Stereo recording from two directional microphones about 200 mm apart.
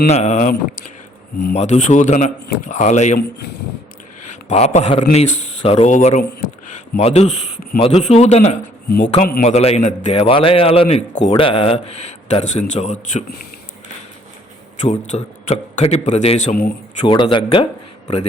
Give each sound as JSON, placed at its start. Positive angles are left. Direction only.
{"t": 0.1, "sound": "a man's voice", "side_deg": 35}
{"t": 1.5, "sound": "a man's voice", "side_deg": 35}
{"t": 4.4, "sound": "a man's voice", "side_deg": 35}
{"t": 14.8, "sound": "a man's voice", "side_deg": 35}
{"t": 17.0, "sound": "speech", "side_deg": 25}